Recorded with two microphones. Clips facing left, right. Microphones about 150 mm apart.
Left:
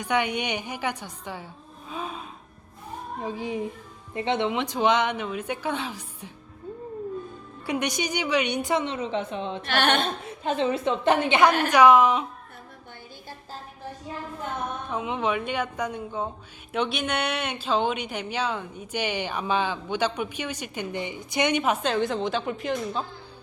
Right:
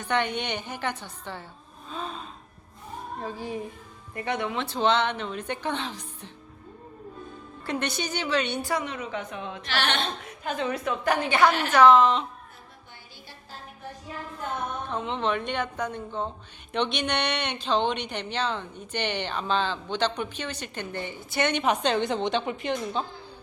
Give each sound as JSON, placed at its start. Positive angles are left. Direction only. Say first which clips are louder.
{"t": 0.0, "sound": "a woman's voice", "louder": "left 1 dB", "side_deg": 10}
{"t": 1.9, "sound": "gasp", "louder": "left 1 dB", "side_deg": 10}
{"t": 3.2, "sound": "a woman's voice", "louder": "left 4 dB", "side_deg": 15}
{"t": 7.7, "sound": "a woman's voice", "louder": "left 2 dB", "side_deg": 15}
{"t": 9.6, "sound": "a sound", "louder": "left 5 dB", "side_deg": 50}
{"t": 10.4, "sound": "a woman's voice", "louder": "left 4 dB", "side_deg": 25}
{"t": 14.8, "sound": "a woman's voice", "louder": "left 1 dB", "side_deg": 10}
{"t": 21.6, "sound": "a woman's voice", "louder": "even", "side_deg": 5}